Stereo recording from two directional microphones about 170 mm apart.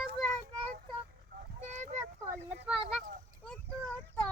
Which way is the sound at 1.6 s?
45° right (ahead or behind).